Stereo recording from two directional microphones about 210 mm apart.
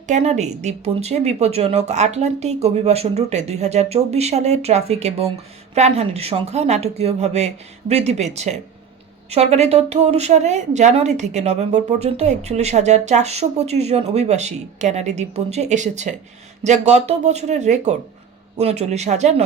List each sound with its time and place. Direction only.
0.1 s speech: 30° right (ahead or behind)